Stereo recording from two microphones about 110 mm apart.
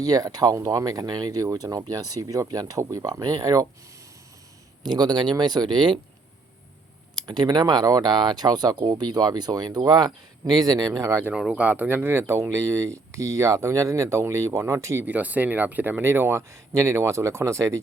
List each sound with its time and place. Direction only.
0.0 s speech: 35° right (ahead or behind)
4.8 s speech: 40° right (ahead or behind)
7.2 s speech: 40° right (ahead or behind)
11.3 s speech: 10° right (ahead or behind); by 15.0 s 30° right (ahead or behind)
15.0 s speech: 15° right (ahead or behind)